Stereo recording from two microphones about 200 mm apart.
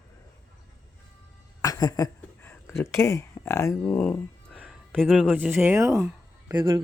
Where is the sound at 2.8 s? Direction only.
15° left (ahead or behind); by 6.8 s 20° right (ahead or behind).